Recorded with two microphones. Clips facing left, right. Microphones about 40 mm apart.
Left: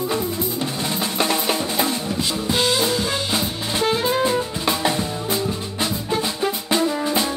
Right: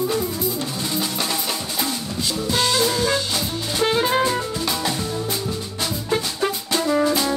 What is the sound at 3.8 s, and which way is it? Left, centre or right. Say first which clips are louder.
Music: right 1 dB; centre.